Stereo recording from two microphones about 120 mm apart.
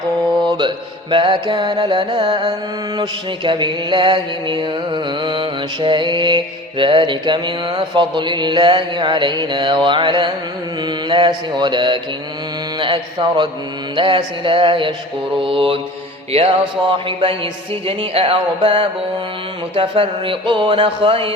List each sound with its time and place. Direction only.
0.4 s mantra: 40° right (ahead or behind)
13.9 s music: 40° right (ahead or behind)